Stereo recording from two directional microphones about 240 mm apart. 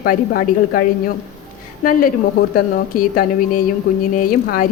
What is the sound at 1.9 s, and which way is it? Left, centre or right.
A woman's voice, left.